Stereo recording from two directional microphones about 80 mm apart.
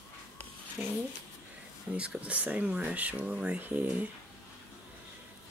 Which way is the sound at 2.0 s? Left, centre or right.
Centre.